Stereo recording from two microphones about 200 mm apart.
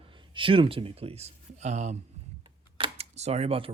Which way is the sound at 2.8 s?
30° right (ahead or behind).